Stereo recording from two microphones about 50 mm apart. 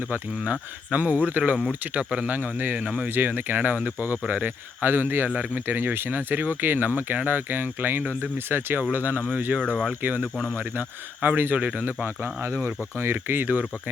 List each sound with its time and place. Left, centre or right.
0.9 s speech: right
12.0 s speech: right
13.5 s speech: right